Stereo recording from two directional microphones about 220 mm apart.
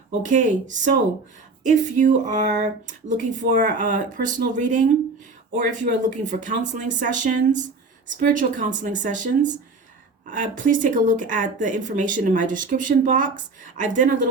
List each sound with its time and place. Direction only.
0.3 s speech: 35° right (ahead or behind)